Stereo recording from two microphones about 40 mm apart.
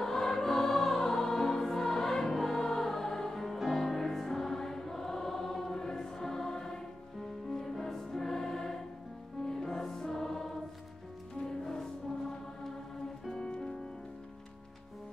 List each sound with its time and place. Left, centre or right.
0.0 s choir: centre
3.7 s music: centre
5.8 s choir: centre
7.4 s music: centre
13.5 s music: left